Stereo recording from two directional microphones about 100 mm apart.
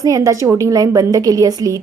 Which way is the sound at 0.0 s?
35° right (ahead or behind).